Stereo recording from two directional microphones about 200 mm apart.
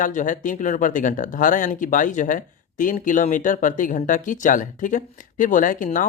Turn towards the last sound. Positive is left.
turn(degrees=40)  # may be behind; listen again after turning